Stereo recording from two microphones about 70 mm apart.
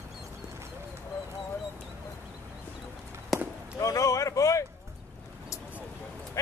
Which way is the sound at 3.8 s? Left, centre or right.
Left.